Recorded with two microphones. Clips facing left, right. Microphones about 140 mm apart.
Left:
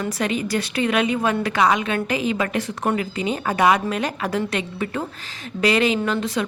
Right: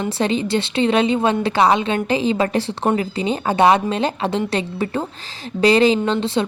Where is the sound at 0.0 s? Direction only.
30° right (ahead or behind).